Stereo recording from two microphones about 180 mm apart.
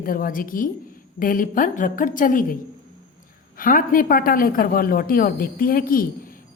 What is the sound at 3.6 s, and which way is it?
Speech, 50° left (ahead or behind).